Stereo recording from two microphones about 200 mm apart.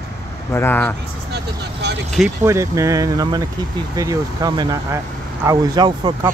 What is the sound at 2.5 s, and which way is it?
Speech, 15° right (ahead or behind).